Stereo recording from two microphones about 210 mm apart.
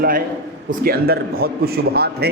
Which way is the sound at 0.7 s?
45° right (ahead or behind).